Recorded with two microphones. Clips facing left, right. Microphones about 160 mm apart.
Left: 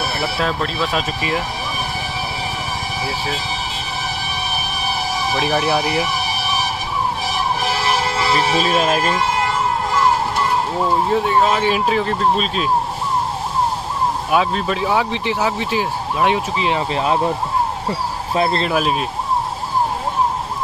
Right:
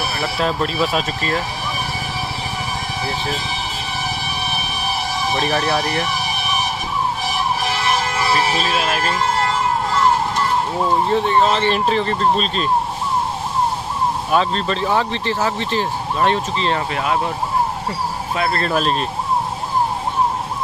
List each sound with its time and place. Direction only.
0.4 s speech: 5° right (ahead or behind)
1.0 s speech: 10° left (ahead or behind)
5.3 s speech: 5° left (ahead or behind)
8.5 s speech: 40° left (ahead or behind)
11.1 s speech: 10° left (ahead or behind)
14.3 s speech: 10° left (ahead or behind)
16.9 s speech: 30° left (ahead or behind)
18.3 s speech: 25° left (ahead or behind)
18.7 s speech: 10° left (ahead or behind)